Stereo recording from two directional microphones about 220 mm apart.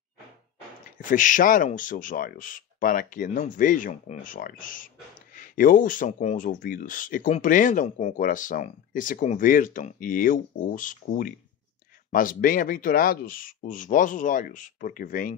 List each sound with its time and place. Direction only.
0.9 s speech: 35° left (ahead or behind)